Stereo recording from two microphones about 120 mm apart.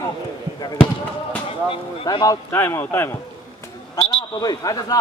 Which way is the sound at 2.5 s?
20° left (ahead or behind).